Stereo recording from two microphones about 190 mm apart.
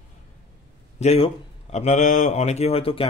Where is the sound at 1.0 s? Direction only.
35° left (ahead or behind).